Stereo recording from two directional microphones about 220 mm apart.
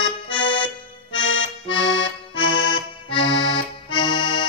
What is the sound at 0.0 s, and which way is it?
Accordion, 20° left (ahead or behind).